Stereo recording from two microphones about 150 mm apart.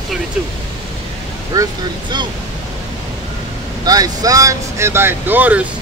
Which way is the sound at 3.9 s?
25° right (ahead or behind).